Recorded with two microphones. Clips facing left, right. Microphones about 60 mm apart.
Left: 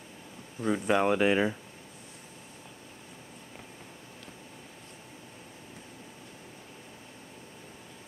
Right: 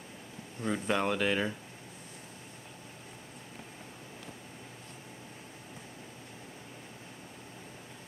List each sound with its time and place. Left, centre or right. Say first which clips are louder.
0.6 s speech: left 5 dB; centre